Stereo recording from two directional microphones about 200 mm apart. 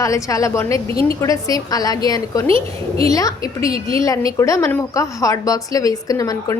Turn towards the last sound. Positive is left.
turn(degrees=15)  # may be behind; listen again after turning